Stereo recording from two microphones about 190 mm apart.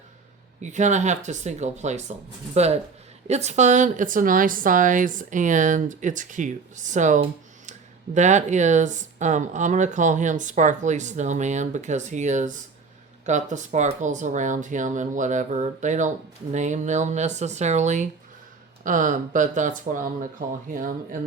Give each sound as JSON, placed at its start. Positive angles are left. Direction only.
{"t": 0.6, "sound": "speech", "side_deg": -40}
{"t": 3.2, "sound": "speech", "side_deg": -35}